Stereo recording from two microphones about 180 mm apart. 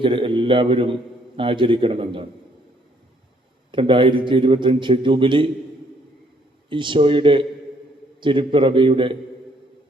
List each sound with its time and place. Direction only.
0.0 s a man's voice: 30° right (ahead or behind)
3.7 s a man's voice: 30° right (ahead or behind)
6.7 s a man's voice: 25° right (ahead or behind)